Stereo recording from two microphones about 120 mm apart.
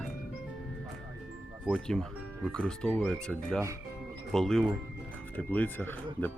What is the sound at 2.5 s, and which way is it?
Speech, 5° left (ahead or behind).